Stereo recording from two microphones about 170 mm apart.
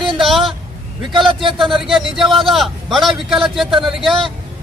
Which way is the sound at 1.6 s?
Centre (ahead or behind).